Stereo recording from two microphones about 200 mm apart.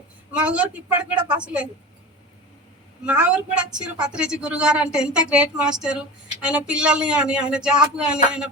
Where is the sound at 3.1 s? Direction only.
5° right (ahead or behind).